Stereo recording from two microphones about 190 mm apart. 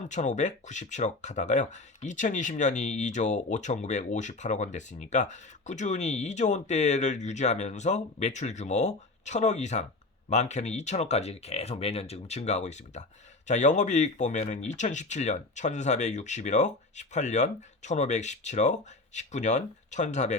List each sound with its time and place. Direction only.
0.1 s speech: 40° left (ahead or behind)